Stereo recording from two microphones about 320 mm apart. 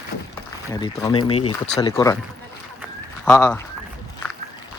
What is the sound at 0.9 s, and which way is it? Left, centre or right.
Speech, centre.